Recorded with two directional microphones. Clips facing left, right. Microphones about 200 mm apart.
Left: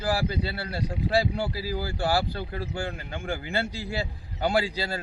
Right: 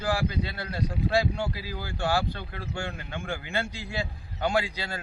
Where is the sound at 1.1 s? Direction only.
35° left (ahead or behind).